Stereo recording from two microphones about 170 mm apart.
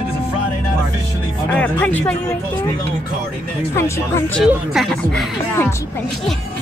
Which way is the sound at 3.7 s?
15° left (ahead or behind).